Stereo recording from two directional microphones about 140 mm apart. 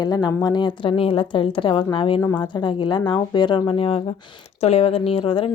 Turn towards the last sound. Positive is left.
turn(degrees=40)  # may be behind; listen again after turning